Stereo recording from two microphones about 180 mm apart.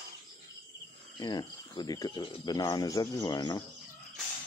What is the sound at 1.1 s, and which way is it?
Speech, 25° left (ahead or behind).